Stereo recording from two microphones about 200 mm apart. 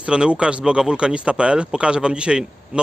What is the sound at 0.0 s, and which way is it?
Speech, 5° right (ahead or behind).